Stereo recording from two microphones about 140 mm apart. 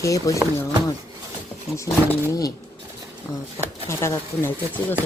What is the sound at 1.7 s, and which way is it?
Speech, 25° left (ahead or behind).